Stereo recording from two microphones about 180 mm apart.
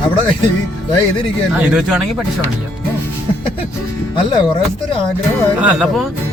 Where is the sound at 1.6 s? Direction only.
5° right (ahead or behind).